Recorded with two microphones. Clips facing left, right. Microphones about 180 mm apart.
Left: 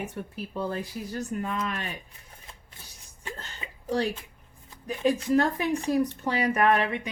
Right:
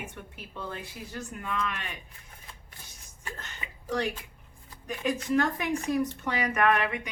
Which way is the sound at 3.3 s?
30° left (ahead or behind).